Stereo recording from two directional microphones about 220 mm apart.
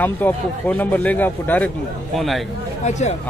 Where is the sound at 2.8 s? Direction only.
30° left (ahead or behind).